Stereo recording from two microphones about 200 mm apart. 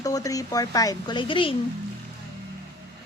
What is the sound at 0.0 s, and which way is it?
Speech, 15° left (ahead or behind).